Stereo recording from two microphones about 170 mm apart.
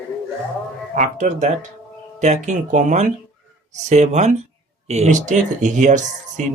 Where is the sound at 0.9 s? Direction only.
45° right (ahead or behind).